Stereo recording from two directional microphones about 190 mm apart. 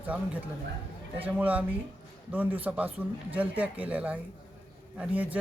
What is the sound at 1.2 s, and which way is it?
Speech, 10° right (ahead or behind).